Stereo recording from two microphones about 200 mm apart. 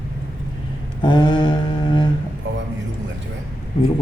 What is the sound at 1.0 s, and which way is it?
Speech, 25° left (ahead or behind).